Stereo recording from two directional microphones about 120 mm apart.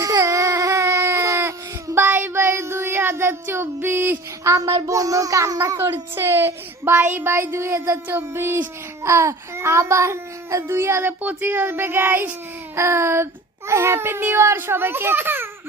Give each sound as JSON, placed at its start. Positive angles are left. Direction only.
{"t": 0.0, "sound": "baby cry", "side_deg": -25}
{"t": 9.0, "sound": "speech", "side_deg": -25}